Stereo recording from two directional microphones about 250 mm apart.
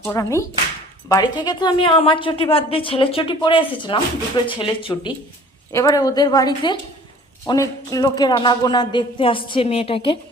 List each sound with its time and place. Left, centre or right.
0.1 s a woman's voice: centre